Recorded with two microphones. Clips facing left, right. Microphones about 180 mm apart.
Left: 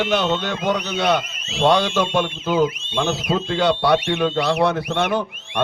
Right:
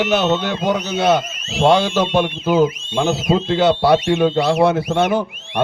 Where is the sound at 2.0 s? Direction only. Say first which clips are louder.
Right 3 dB; 20° right (ahead or behind).